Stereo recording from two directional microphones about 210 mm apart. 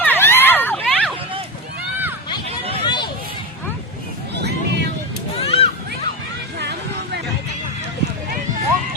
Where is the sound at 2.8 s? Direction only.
20° left (ahead or behind).